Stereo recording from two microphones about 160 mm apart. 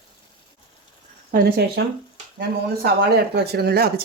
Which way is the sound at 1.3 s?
80° right.